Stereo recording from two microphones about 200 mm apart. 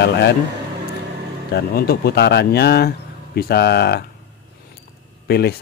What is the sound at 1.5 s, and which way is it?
Speech, 50° left (ahead or behind).